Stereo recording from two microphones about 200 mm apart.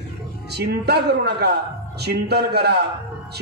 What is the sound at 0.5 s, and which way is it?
A man's voice, 55° right (ahead or behind).